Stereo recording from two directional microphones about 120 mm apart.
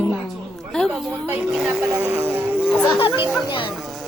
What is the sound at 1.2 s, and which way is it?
Speech, 15° right (ahead or behind).